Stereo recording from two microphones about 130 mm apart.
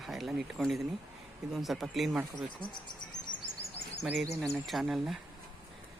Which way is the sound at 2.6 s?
35° left (ahead or behind).